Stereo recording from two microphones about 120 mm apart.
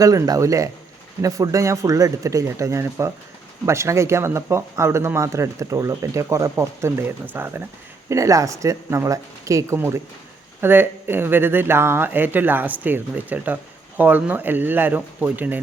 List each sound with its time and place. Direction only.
0.0 s a man's voice: 30° right (ahead or behind)